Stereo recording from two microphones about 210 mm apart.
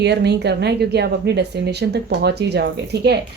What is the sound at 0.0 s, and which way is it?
Speech, 55° right (ahead or behind).